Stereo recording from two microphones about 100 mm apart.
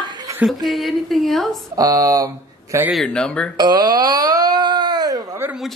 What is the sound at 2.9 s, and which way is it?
Speech, 5° left (ahead or behind).